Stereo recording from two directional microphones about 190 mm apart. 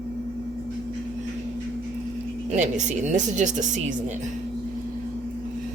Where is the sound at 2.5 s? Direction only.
40° right (ahead or behind).